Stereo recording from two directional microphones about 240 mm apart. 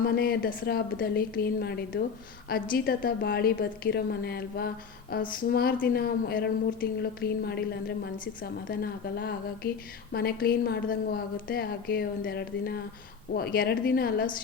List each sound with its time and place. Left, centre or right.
0.0 s a woman's voice: left